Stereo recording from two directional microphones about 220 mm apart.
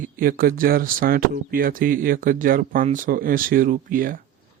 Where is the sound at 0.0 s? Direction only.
40° right (ahead or behind).